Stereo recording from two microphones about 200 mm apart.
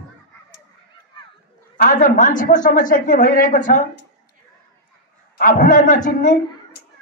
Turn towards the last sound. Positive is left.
turn(degrees=40)  # may be behind; listen again after turning